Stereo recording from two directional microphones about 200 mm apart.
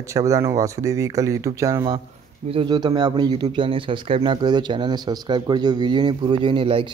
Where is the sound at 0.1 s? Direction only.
15° right (ahead or behind).